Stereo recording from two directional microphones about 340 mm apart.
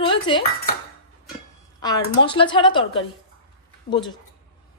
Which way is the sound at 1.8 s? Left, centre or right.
Centre.